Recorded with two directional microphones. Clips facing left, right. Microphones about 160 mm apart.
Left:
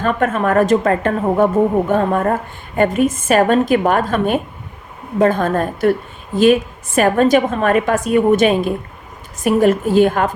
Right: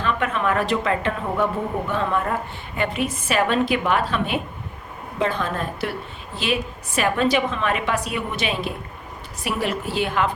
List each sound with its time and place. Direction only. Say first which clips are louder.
0.0 s a woman's voice: left 6 dB; 45° left (ahead or behind)